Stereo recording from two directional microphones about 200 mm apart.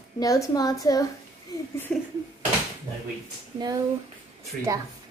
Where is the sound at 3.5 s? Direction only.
20° right (ahead or behind).